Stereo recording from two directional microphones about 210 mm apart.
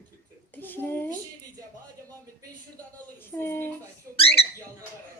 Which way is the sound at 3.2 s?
10° left (ahead or behind).